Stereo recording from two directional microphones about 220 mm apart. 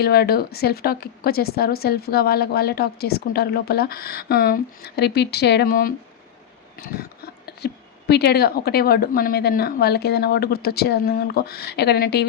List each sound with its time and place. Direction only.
0.0 s speech: 45° left (ahead or behind)
7.4 s speech: 50° left (ahead or behind)